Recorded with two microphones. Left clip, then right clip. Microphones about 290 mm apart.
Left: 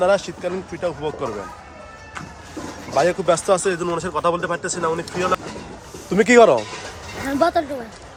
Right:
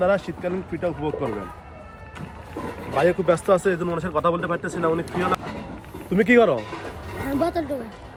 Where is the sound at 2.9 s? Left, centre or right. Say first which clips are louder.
Left 2 dB; centre.